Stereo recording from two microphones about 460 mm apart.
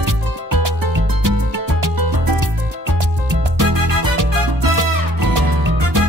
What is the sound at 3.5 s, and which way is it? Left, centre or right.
Music, right.